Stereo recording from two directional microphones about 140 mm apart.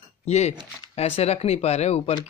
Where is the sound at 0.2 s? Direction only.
50° left (ahead or behind).